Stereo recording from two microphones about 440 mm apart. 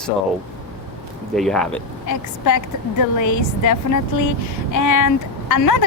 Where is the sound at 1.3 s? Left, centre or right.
Centre.